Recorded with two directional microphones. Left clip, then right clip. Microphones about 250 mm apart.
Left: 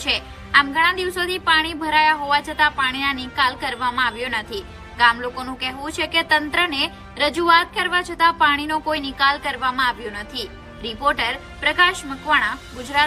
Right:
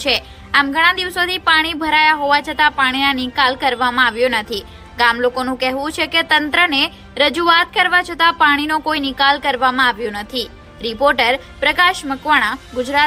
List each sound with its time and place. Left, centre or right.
0.0 s a woman's voice: centre